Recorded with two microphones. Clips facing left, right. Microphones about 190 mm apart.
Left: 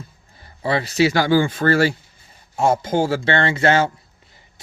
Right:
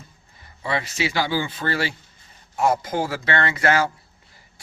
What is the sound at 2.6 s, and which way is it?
A man's voice, 25° left (ahead or behind).